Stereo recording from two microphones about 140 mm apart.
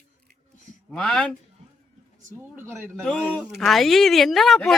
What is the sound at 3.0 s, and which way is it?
Speech, 5° left (ahead or behind).